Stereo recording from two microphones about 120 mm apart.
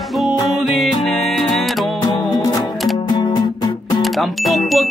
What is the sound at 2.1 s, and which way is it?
Music, 35° left (ahead or behind).